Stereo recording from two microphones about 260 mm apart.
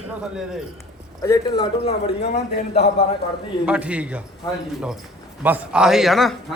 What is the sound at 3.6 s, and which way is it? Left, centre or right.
Speech, centre.